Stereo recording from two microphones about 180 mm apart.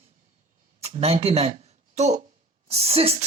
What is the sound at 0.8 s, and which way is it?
Speech, 35° right (ahead or behind).